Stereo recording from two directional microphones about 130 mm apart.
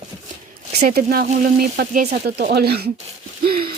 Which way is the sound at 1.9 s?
90° right.